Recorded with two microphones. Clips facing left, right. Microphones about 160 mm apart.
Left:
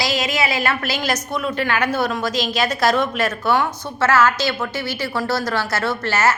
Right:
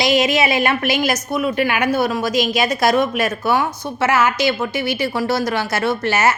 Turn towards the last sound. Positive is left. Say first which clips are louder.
# right 2 dB
turn(degrees=-15)  # may be behind; listen again after turning